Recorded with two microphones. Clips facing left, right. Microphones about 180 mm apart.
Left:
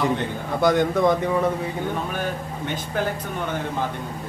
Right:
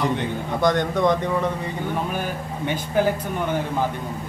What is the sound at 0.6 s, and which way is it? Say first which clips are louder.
Speech: left 2 dB; 5° left (ahead or behind).